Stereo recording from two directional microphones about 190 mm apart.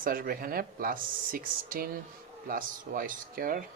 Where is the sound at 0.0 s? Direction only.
50° right (ahead or behind).